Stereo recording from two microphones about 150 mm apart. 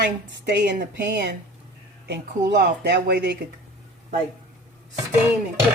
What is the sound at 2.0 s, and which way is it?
Speech, 90° right.